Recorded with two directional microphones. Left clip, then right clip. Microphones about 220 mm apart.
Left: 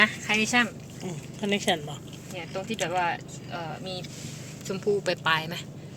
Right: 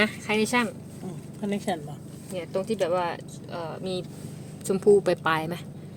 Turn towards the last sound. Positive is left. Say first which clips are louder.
# even
turn(degrees=-45)  # may be behind; listen again after turning